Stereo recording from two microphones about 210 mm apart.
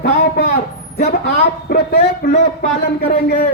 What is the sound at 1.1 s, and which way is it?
Speech, 40° left (ahead or behind).